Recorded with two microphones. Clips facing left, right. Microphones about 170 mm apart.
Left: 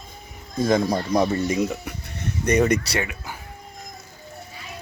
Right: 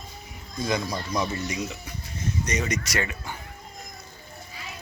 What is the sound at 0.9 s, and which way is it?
Speech, 55° left (ahead or behind).